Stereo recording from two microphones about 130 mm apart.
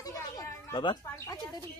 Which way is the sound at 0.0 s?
25° left (ahead or behind).